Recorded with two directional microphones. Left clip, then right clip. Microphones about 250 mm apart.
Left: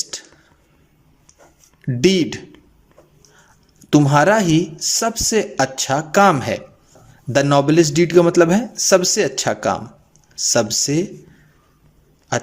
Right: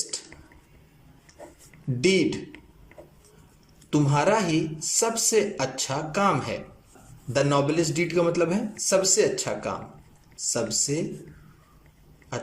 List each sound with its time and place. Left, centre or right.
2.0 s speech: left
3.8 s speech: left